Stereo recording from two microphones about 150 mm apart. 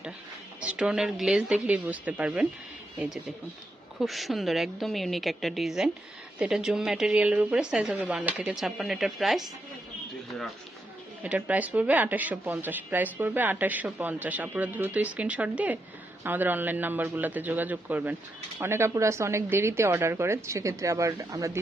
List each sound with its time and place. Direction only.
0.6 s speech: 5° right (ahead or behind)
4.0 s a woman's voice: centre (ahead or behind)
11.2 s a woman's voice: 10° right (ahead or behind)